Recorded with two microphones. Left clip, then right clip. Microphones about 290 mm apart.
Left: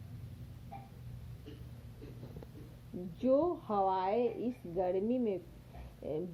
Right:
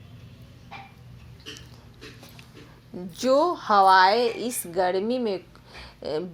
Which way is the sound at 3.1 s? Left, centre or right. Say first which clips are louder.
Right 10 dB; right.